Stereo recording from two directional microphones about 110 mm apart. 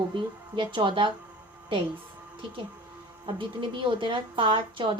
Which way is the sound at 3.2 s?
50° right (ahead or behind).